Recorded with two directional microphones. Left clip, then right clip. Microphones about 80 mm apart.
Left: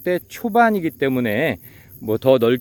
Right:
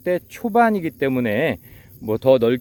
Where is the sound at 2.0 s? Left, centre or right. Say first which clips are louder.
Even; left.